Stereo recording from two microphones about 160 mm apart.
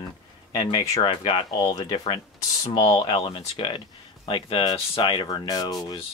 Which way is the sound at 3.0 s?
35° left (ahead or behind).